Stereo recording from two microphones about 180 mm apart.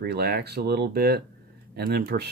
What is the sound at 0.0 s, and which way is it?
Speech, 60° right (ahead or behind).